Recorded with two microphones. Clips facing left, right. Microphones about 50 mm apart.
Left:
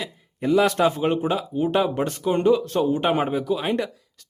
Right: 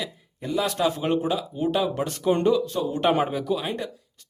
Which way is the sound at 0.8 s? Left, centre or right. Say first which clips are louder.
Left 2 dB; centre.